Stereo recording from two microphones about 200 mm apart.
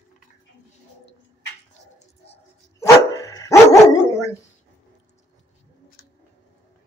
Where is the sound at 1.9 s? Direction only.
30° left (ahead or behind).